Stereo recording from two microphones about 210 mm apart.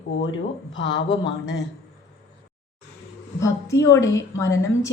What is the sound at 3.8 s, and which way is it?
A woman's voice, 15° left (ahead or behind).